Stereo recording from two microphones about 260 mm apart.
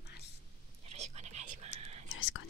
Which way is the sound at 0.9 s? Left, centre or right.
Right.